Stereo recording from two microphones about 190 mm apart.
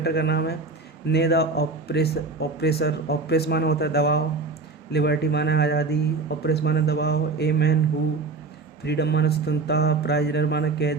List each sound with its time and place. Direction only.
0.0 s speech: 60° left (ahead or behind)
8.8 s speech: 60° left (ahead or behind)